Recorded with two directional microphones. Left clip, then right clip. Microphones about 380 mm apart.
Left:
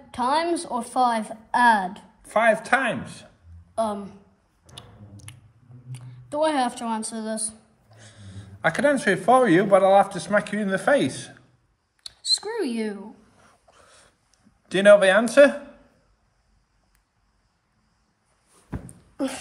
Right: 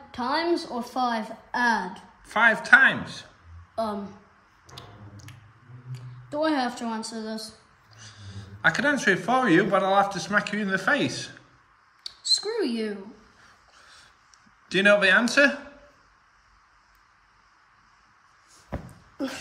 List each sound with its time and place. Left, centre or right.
0.1 s a woman's voice: centre
3.7 s a woman's voice: centre
4.6 s a sound: centre
5.9 s a woman's voice: centre
12.3 s a sound: centre
13.7 s dog: centre
14.7 s speech: centre